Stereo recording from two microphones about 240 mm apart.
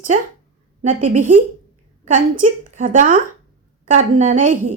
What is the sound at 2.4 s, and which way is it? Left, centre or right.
A woman's voice, right.